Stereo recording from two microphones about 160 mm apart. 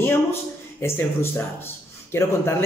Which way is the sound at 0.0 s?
15° left (ahead or behind).